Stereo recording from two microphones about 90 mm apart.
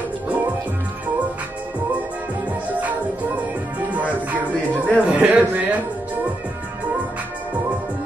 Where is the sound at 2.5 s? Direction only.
15° right (ahead or behind).